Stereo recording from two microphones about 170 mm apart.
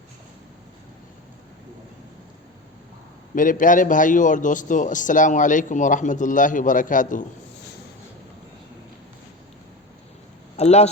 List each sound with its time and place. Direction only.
3.3 s a man's voice: 50° left (ahead or behind)
10.6 s speech: 40° left (ahead or behind)